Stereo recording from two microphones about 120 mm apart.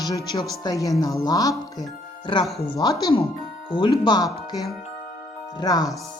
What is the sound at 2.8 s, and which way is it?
Speech, 40° left (ahead or behind).